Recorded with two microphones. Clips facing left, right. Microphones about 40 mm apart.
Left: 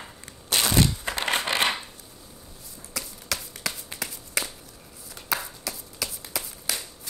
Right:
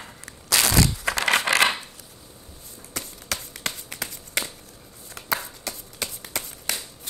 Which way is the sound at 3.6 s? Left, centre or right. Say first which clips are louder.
Right 1 dB; right.